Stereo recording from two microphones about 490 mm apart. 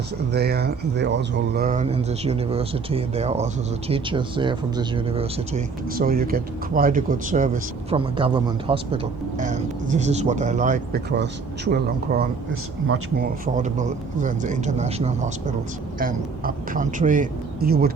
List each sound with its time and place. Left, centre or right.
0.3 s speech: centre